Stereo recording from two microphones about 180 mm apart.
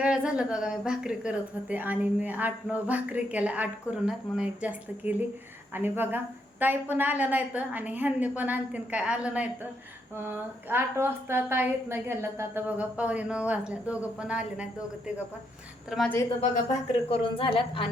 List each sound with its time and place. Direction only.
0.0 s a woman's voice: 5° right (ahead or behind)
17.1 s a woman's voice: 30° left (ahead or behind)